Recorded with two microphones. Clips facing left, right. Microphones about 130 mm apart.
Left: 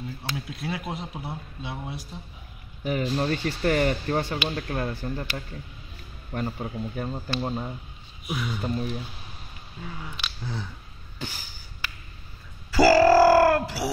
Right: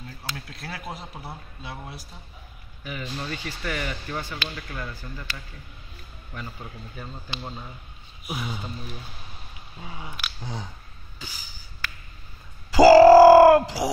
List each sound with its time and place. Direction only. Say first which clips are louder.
0.5 s speech: left 6 dB; 5° left (ahead or behind)
2.8 s speech: left 8 dB; 45° left (ahead or behind)
6.3 s speech: left 8 dB; 50° left (ahead or behind)
8.3 s speech: left 2 dB; 30° right (ahead or behind)
9.8 s speech: left 1 dB; 20° right (ahead or behind)
12.7 s grunt: right 6 dB; 25° right (ahead or behind)